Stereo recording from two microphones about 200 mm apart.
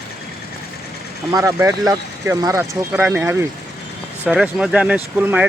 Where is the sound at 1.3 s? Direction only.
15° right (ahead or behind).